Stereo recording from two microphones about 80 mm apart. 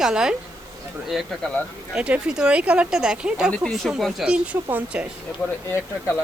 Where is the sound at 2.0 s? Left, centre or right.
Centre.